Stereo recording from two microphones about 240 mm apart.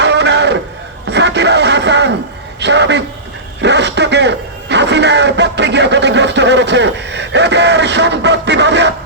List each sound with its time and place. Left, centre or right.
0.0 s a sound: right
1.0 s music: right
2.6 s a man's voice: right
3.6 s radio: right